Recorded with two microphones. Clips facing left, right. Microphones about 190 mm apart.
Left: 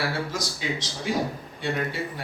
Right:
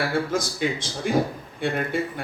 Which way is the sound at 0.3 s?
55° right (ahead or behind).